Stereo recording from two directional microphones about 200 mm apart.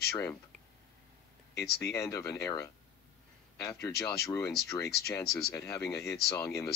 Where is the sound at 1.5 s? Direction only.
50° left (ahead or behind).